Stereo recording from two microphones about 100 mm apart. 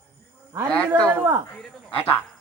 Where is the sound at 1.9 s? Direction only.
75° left (ahead or behind).